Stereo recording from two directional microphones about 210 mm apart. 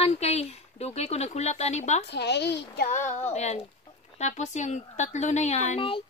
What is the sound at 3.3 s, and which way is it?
A woman's voice, 35° left (ahead or behind).